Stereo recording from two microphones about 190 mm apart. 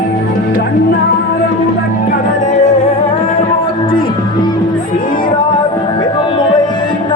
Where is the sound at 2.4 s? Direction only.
35° left (ahead or behind).